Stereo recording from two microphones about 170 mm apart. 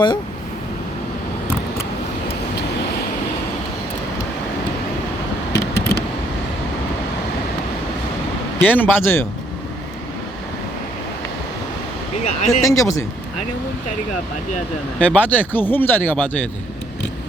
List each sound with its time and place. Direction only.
5.5 s a sound: 75° left (ahead or behind)
8.6 s speech: 10° left (ahead or behind)
12.2 s speech: 45° left (ahead or behind)
12.6 s speech: 20° left (ahead or behind)
14.9 s speech: 10° left (ahead or behind)